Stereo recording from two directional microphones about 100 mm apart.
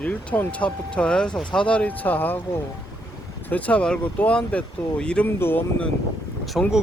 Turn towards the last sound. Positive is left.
turn(degrees=0)  # may be behind; listen again after turning